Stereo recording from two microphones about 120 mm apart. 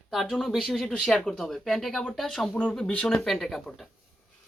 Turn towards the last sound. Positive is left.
turn(degrees=0)  # may be behind; listen again after turning